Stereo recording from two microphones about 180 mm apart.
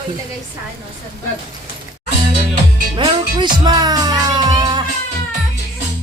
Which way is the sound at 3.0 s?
25° right (ahead or behind).